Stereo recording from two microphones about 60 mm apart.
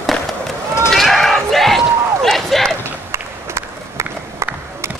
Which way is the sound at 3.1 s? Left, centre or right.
Right.